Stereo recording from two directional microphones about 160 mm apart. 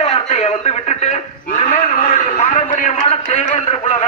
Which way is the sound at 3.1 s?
40° left (ahead or behind).